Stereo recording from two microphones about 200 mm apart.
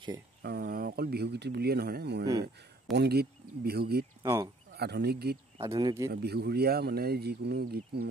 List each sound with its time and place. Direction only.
0.4 s speech: 50° right (ahead or behind)
4.2 s speech: 15° right (ahead or behind)
4.7 s speech: 55° right (ahead or behind)
5.6 s speech: 20° right (ahead or behind)
6.2 s speech: 55° right (ahead or behind)